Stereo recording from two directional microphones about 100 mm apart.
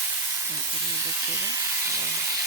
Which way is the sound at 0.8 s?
30° right (ahead or behind).